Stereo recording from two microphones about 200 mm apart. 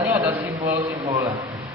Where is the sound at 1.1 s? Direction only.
20° right (ahead or behind).